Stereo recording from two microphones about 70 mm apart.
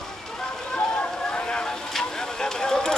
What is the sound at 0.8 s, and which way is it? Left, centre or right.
Vehicle, centre.